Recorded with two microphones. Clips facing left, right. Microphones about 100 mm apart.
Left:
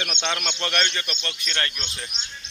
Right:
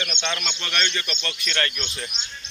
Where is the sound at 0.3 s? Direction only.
50° left (ahead or behind).